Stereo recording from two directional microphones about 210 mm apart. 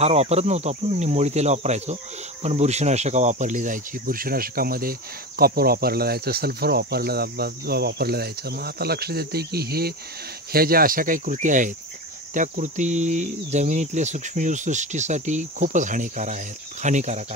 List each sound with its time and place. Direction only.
0.0 s speech: 30° right (ahead or behind)